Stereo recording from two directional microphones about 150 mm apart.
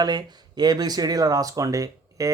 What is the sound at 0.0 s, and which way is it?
Speech, 25° right (ahead or behind).